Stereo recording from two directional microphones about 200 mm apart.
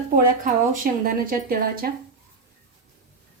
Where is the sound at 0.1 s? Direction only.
45° right (ahead or behind).